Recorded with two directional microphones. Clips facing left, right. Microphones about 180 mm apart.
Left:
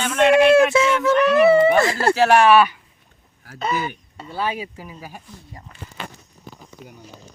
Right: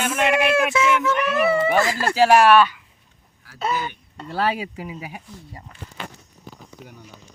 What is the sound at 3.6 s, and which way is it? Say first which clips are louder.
Speech: left 1 dB; centre (ahead or behind).